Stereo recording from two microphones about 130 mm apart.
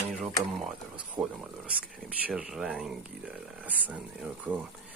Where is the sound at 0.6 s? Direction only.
Centre (ahead or behind).